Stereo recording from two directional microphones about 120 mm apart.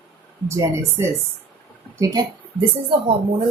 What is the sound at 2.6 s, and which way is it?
Speech, 50° right (ahead or behind).